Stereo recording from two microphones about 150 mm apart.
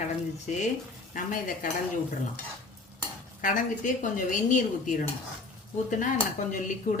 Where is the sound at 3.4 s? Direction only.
60° left (ahead or behind).